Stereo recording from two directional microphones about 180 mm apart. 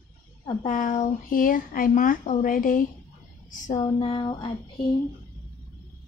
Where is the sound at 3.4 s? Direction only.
45° left (ahead or behind).